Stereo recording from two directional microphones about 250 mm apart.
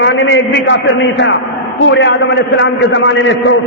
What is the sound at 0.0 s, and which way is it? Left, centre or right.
A man's voice, left.